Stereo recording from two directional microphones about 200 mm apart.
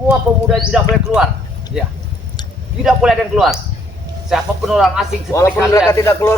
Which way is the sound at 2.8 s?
5° right (ahead or behind).